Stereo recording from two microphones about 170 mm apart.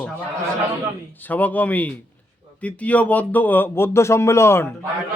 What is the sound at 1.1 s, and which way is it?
Speech, 10° left (ahead or behind).